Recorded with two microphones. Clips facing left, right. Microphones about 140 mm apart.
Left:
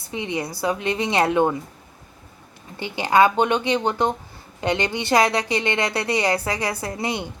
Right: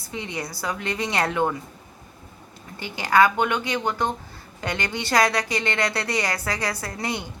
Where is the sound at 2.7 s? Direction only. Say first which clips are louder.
Left 2 dB; 20° left (ahead or behind).